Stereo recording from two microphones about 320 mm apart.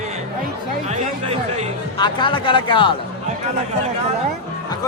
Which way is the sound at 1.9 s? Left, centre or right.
Centre.